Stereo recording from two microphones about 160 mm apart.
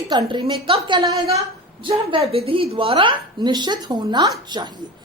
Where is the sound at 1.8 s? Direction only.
35° right (ahead or behind).